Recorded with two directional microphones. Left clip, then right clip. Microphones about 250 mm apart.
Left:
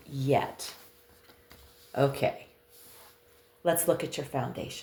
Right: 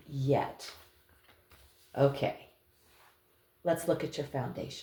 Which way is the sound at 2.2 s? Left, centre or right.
Left.